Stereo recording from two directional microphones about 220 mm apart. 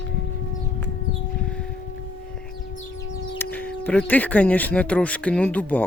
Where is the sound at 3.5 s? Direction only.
10° left (ahead or behind).